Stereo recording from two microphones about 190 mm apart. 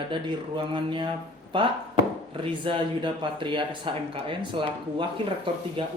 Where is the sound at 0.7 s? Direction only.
25° right (ahead or behind).